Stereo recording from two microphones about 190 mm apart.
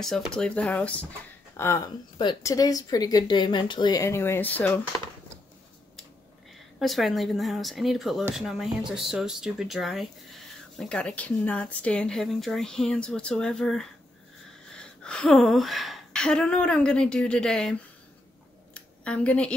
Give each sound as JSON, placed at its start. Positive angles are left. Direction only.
{"t": 0.0, "sound": "speech", "side_deg": 0}
{"t": 6.8, "sound": "speech", "side_deg": 0}
{"t": 14.8, "sound": "a sound", "side_deg": 5}